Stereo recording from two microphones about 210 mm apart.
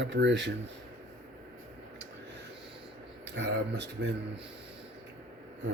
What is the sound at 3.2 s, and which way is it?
Speech, 55° right (ahead or behind).